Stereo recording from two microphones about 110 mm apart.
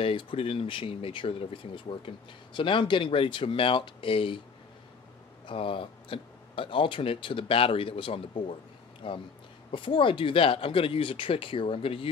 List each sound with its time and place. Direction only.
0.0 s speech: 50° left (ahead or behind)
5.5 s speech: 55° left (ahead or behind)